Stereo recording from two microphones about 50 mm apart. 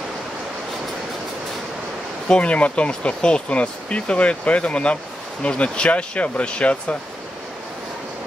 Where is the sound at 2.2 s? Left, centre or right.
Left.